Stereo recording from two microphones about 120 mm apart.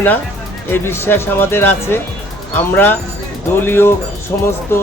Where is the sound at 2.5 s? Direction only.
15° left (ahead or behind).